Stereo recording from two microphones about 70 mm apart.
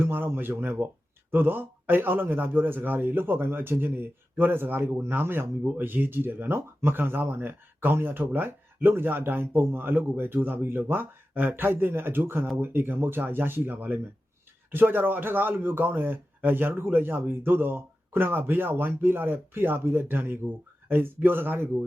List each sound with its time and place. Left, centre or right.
0.0 s a man's voice: right